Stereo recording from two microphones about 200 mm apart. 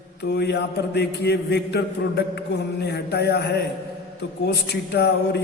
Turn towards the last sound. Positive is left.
turn(degrees=55)  # may be behind; listen again after turning